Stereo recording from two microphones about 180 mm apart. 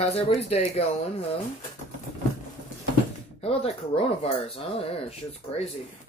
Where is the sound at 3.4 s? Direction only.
35° left (ahead or behind).